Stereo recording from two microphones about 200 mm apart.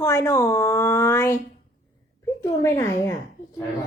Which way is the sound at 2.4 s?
15° left (ahead or behind).